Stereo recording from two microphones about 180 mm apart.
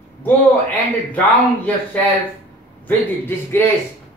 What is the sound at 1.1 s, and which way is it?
Speech, 10° left (ahead or behind).